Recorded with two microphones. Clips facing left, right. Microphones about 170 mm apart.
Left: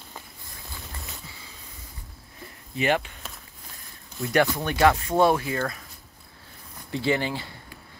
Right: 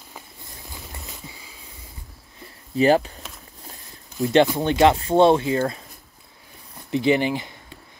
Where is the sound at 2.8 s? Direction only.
35° right (ahead or behind).